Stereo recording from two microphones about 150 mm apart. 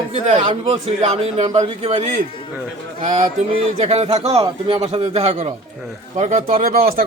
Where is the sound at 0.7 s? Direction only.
45° right (ahead or behind).